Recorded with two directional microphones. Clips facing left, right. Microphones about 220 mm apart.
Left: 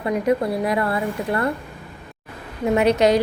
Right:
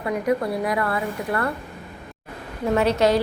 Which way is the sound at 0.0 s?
25° left (ahead or behind).